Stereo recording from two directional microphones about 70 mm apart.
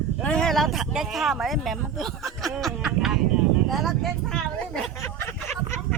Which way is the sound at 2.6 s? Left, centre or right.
Centre.